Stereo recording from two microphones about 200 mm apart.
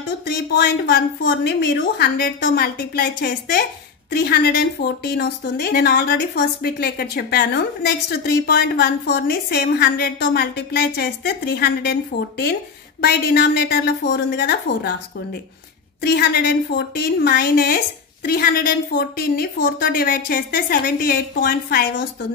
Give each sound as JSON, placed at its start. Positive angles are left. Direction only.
{"t": 0.2, "sound": "a woman's voice", "side_deg": 50}
{"t": 16.0, "sound": "speech", "side_deg": 50}